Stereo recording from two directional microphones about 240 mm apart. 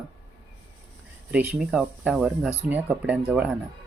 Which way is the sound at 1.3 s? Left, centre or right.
Centre.